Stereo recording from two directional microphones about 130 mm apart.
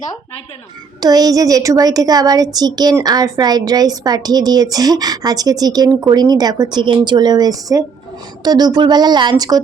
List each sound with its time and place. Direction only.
1.0 s speech: 30° right (ahead or behind)